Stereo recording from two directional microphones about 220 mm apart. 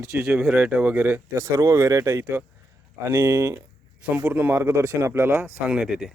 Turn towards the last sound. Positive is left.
turn(degrees=0)  # may be behind; listen again after turning